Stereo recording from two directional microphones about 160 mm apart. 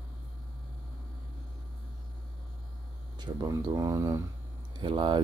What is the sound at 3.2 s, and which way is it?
Speech, 25° right (ahead or behind).